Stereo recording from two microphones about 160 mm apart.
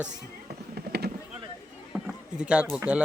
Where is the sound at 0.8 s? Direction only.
85° right.